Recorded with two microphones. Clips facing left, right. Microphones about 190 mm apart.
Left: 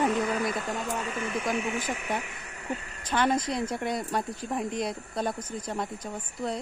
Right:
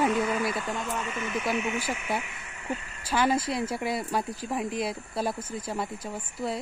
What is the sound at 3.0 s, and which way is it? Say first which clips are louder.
Speech: right 1 dB; 5° right (ahead or behind).